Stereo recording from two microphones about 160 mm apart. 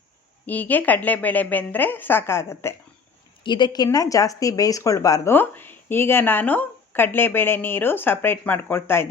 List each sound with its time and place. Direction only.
0.4 s speech: 10° left (ahead or behind)
3.4 s a woman's voice: 30° left (ahead or behind)